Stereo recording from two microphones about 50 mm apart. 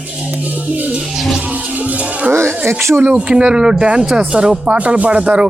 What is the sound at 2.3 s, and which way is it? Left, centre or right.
Speech, right.